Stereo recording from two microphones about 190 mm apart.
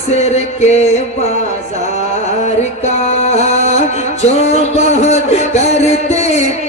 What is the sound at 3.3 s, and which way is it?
Music, 35° left (ahead or behind).